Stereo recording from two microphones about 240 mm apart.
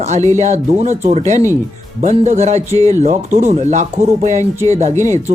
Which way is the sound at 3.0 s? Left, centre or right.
Right.